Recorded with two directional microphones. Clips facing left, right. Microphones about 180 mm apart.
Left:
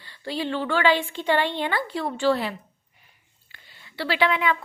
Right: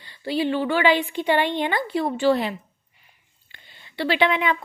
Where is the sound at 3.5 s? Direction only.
20° right (ahead or behind).